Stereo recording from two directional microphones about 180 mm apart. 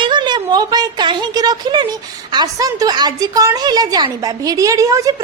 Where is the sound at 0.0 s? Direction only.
25° right (ahead or behind).